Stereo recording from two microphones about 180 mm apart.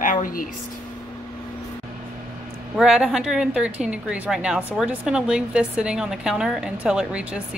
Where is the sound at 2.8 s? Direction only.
5° right (ahead or behind).